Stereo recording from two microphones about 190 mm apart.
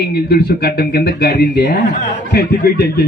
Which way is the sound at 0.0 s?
60° left (ahead or behind).